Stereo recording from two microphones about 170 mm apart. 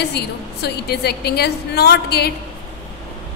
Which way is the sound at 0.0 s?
75° left (ahead or behind).